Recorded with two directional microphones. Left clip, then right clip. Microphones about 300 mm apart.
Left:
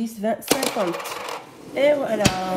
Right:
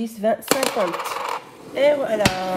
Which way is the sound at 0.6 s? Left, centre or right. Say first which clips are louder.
Right 2 dB; centre.